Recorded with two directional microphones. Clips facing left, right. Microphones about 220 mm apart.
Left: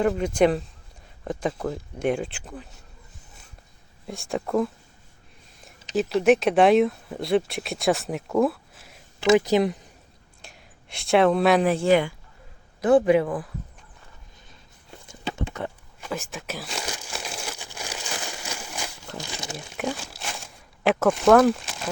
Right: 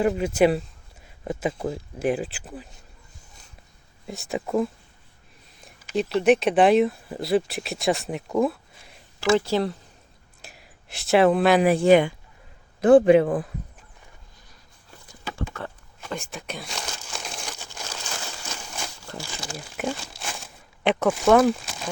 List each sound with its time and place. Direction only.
0.0 s speech: 5° right (ahead or behind)
4.0 s speech: centre (ahead or behind)
6.0 s speech: centre (ahead or behind)
9.2 s speech: 15° left (ahead or behind)
10.4 s speech: 5° right (ahead or behind)
11.7 s a man's voice: 15° right (ahead or behind)
15.0 s a sound: 25° left (ahead or behind)
16.0 s speech: centre (ahead or behind)
16.9 s crumpling: 5° left (ahead or behind)
18.4 s a sound: 10° left (ahead or behind)
19.5 s speech: centre (ahead or behind)